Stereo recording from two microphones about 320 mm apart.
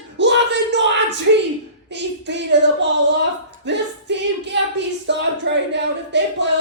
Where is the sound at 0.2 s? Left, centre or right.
Right.